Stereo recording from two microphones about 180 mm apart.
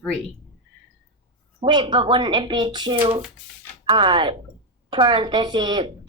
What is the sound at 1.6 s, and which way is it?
A woman's voice, 25° right (ahead or behind).